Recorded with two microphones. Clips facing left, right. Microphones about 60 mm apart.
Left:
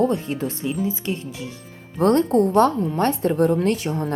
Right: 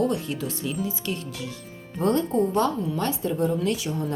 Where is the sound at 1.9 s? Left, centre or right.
Left.